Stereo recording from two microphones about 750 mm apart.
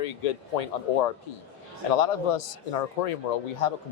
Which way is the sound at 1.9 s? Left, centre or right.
Left.